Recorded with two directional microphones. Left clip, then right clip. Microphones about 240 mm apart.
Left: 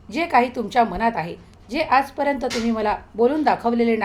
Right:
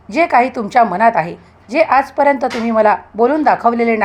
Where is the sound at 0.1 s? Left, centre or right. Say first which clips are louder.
Right 7 dB; right.